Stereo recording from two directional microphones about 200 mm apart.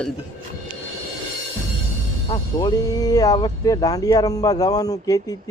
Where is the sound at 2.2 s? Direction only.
20° left (ahead or behind).